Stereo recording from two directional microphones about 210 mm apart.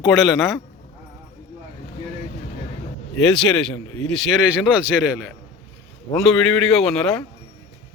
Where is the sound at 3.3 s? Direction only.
5° left (ahead or behind).